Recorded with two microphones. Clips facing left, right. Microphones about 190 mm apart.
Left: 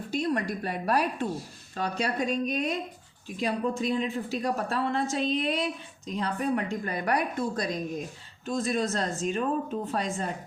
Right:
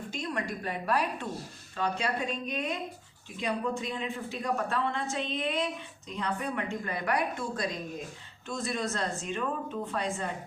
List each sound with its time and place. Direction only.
0.1 s speech: 35° left (ahead or behind)